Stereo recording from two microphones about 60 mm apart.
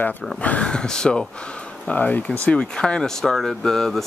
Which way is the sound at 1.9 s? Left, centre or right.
Left.